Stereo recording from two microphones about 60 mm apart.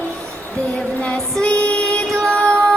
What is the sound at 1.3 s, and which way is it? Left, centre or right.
Music, centre.